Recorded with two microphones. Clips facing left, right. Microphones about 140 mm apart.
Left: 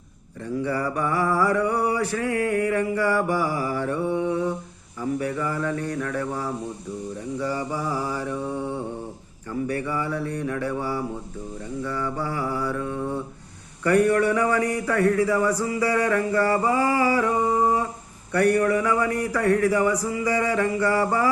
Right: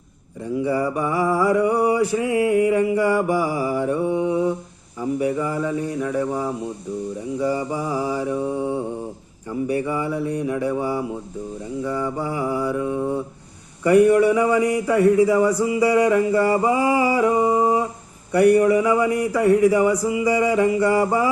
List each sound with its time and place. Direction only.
0.4 s mantra: 15° right (ahead or behind)